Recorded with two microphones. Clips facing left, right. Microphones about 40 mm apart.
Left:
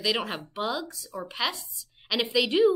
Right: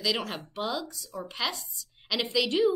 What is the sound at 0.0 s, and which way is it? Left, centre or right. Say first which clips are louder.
A woman's voice: left 2 dB; centre.